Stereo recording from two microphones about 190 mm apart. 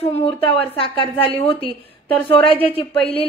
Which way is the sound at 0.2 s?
30° left (ahead or behind).